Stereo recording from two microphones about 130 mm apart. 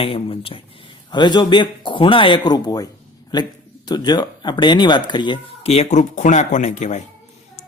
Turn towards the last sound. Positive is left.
turn(degrees=65)  # may be behind; listen again after turning